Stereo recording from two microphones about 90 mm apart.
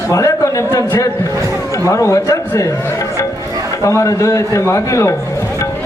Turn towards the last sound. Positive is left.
turn(degrees=35)  # may be behind; listen again after turning